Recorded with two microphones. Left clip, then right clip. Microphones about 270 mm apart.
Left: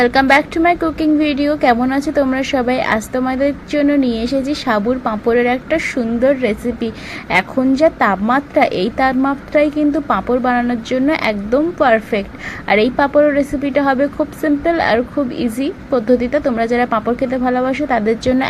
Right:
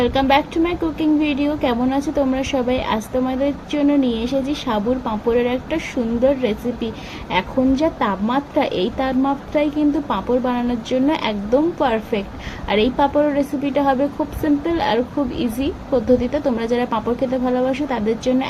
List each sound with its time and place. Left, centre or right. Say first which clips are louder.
0.0 s speech: left 5 dB; centre